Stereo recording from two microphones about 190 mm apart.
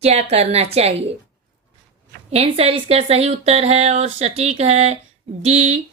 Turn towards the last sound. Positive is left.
turn(degrees=-35)  # may be behind; listen again after turning